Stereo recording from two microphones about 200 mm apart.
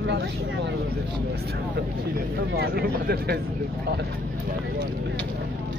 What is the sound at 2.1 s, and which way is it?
Speech, 50° right (ahead or behind).